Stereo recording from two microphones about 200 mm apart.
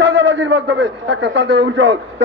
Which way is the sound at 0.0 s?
60° right (ahead or behind).